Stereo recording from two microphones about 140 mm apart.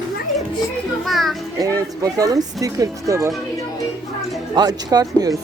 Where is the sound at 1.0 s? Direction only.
Centre (ahead or behind).